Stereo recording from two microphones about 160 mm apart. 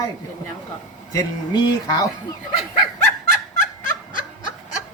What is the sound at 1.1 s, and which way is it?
Speech, 25° left (ahead or behind).